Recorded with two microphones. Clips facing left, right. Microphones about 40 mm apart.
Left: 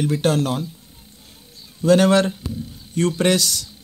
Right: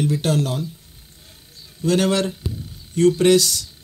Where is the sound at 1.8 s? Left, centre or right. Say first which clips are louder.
Left 4 dB; left.